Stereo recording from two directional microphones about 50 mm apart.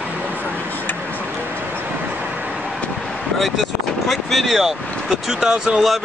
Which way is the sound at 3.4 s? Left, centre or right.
Centre.